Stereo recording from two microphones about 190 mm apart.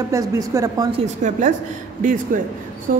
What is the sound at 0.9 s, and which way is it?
Speech, 40° right (ahead or behind).